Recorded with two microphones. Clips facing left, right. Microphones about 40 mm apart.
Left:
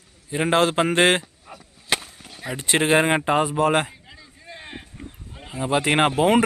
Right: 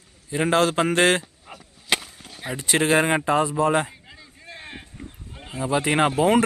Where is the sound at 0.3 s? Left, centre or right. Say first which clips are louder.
Left 1 dB; centre.